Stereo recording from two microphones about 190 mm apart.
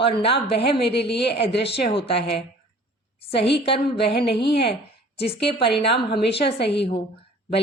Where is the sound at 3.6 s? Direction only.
30° left (ahead or behind).